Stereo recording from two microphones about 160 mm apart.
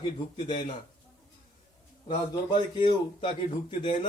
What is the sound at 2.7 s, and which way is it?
Speech, 30° left (ahead or behind).